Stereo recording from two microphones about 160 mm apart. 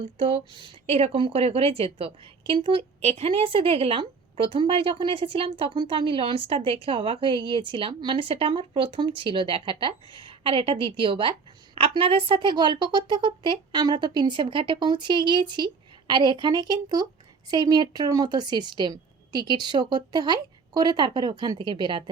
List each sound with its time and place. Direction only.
0.2 s speech: 35° right (ahead or behind)